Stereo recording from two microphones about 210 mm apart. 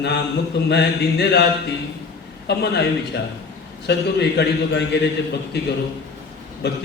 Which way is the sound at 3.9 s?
55° left (ahead or behind).